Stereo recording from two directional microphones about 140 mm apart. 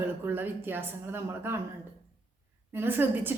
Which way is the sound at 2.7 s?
15° right (ahead or behind).